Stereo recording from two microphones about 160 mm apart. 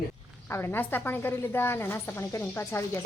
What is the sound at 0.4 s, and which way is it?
A woman's voice, 15° left (ahead or behind).